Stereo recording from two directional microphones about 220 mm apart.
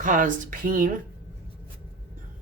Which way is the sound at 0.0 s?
35° right (ahead or behind).